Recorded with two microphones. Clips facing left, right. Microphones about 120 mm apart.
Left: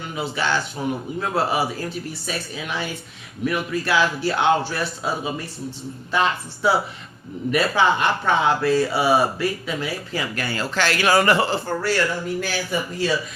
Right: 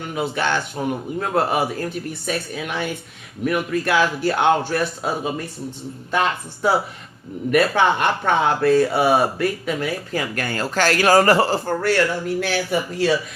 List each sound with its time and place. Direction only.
0.1 s speech: 55° right (ahead or behind)